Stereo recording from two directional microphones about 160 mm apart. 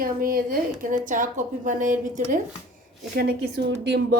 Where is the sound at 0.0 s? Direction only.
65° right (ahead or behind).